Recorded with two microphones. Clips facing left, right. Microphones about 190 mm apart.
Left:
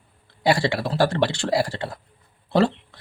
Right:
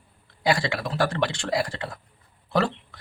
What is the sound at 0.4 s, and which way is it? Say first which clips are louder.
A man's voice: left 4 dB; 30° left (ahead or behind).